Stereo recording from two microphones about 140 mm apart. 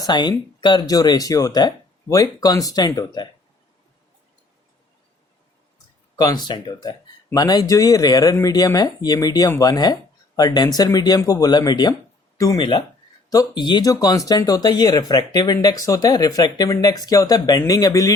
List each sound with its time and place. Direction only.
0.0 s speech: 30° left (ahead or behind)
6.1 s speech: 30° left (ahead or behind)